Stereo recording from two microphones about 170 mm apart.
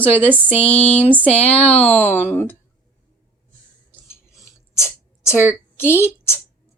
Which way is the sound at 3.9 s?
15° left (ahead or behind).